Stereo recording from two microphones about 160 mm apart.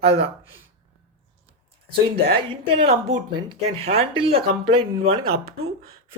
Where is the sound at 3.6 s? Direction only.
40° right (ahead or behind).